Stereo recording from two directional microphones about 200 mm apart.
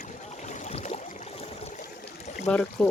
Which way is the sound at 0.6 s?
30° left (ahead or behind).